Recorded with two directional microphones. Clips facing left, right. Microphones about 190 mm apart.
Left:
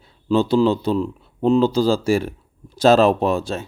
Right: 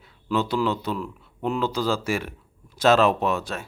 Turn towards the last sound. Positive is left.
turn(degrees=30)  # may be behind; listen again after turning